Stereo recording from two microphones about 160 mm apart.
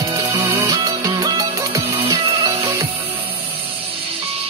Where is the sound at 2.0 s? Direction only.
35° right (ahead or behind).